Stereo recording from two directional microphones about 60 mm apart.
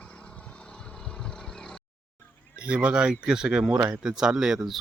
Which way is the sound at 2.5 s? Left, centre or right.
Centre.